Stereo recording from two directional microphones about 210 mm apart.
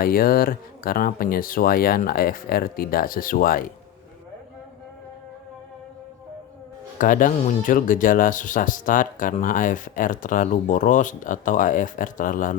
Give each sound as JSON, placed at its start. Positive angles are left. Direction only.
{"t": 0.0, "sound": "speech", "side_deg": 45}
{"t": 7.0, "sound": "speech", "side_deg": 40}